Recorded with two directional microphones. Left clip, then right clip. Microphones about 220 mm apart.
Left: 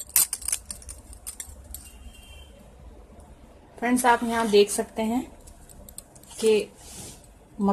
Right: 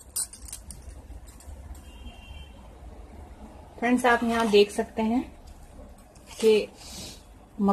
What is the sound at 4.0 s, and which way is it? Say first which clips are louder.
Speech: left 2 dB; 15° left (ahead or behind).